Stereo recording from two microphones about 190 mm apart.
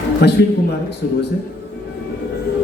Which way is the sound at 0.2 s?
60° left (ahead or behind).